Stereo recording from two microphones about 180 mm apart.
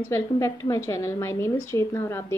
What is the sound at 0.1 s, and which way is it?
Speech, 15° left (ahead or behind).